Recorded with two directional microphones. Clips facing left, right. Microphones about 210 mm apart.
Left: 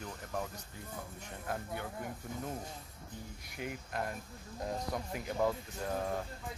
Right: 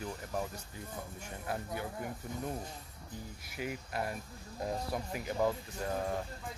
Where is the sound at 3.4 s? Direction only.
5° right (ahead or behind).